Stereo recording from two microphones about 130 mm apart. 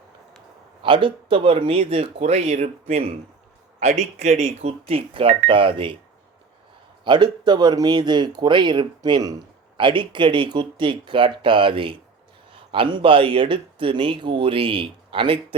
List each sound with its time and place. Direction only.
0.8 s speech: 40° right (ahead or behind)
7.0 s speech: 35° right (ahead or behind)